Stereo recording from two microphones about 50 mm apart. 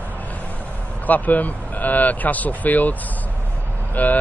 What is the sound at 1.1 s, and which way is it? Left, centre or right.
Speech, left.